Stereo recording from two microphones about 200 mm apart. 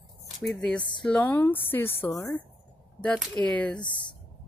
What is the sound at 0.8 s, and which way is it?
Speech, 25° left (ahead or behind).